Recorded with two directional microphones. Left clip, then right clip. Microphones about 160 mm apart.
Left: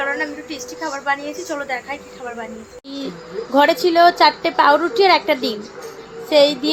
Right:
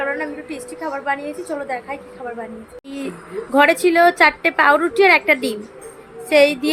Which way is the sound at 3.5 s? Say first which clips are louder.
Even; 20° right (ahead or behind).